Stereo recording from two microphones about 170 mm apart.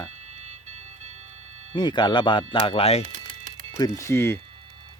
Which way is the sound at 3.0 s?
45° right (ahead or behind).